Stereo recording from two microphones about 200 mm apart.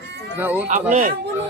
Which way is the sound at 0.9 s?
35° right (ahead or behind).